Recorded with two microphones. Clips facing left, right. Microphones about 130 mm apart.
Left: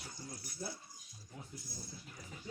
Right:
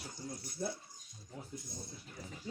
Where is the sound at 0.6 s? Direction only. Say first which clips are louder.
Right 6 dB; 55° right (ahead or behind).